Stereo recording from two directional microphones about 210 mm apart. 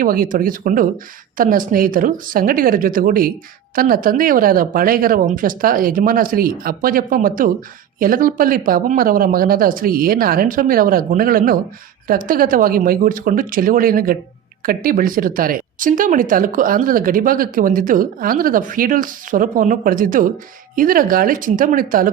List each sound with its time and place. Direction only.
0.0 s speech: 40° right (ahead or behind)